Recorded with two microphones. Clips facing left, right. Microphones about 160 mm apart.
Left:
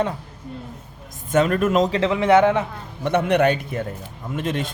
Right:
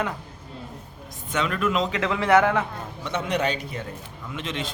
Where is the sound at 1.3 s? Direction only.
45° left (ahead or behind).